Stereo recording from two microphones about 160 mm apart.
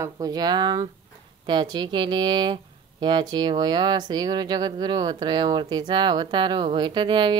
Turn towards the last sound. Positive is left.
turn(degrees=-30)  # may be behind; listen again after turning